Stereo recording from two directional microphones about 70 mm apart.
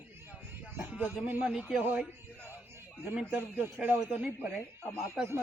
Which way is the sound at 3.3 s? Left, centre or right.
Right.